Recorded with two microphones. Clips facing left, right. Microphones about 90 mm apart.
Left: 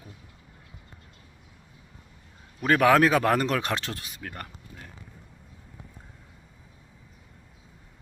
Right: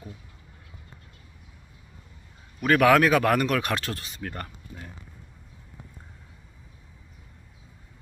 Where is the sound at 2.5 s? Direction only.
25° left (ahead or behind).